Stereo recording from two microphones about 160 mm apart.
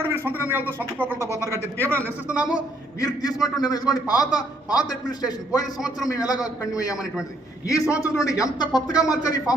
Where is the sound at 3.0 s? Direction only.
25° left (ahead or behind).